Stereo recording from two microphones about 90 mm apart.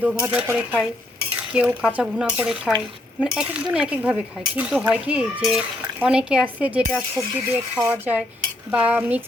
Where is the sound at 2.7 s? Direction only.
Centre (ahead or behind).